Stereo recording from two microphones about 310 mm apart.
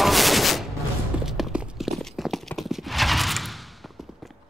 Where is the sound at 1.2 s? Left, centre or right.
Centre.